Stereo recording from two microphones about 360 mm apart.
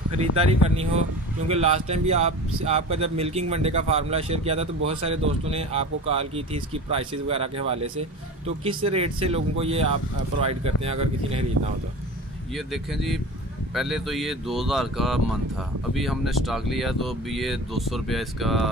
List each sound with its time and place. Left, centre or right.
0.2 s speech: centre
12.5 s speech: centre